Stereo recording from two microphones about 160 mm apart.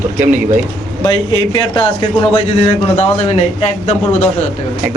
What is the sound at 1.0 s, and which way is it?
A man's voice, 30° left (ahead or behind).